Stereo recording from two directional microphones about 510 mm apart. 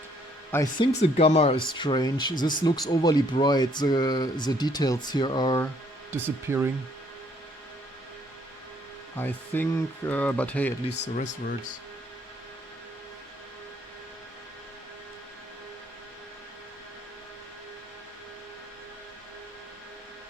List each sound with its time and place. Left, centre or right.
0.5 s speech: centre
6.1 s speech: centre
9.1 s speech: centre
10.9 s speech: centre